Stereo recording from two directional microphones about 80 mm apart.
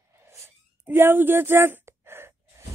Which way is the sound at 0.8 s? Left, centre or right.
Right.